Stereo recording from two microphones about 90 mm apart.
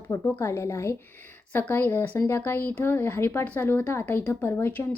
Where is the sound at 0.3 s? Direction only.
30° left (ahead or behind).